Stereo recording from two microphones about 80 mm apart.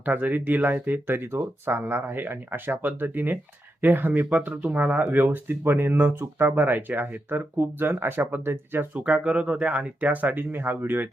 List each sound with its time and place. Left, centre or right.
0.0 s speech: right
9.0 s speech: centre